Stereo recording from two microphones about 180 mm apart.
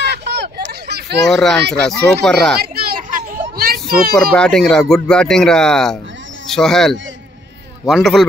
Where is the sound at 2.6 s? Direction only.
60° right (ahead or behind).